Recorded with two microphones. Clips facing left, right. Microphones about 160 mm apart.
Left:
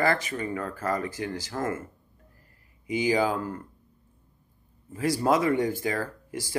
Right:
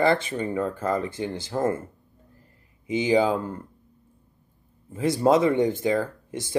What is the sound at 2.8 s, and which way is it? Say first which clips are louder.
Speech: right 3 dB; 25° right (ahead or behind).